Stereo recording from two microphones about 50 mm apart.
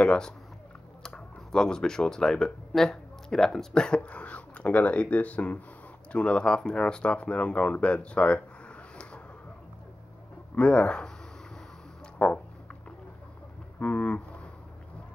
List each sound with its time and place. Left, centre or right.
0.0 s speech: centre
4.0 s speech: left
6.1 s speech: centre
10.5 s speech: left
12.2 s a sound: left
13.7 s vehicle: left